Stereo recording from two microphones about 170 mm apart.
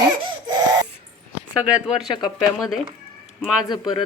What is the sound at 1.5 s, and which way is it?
A woman's voice, 10° right (ahead or behind).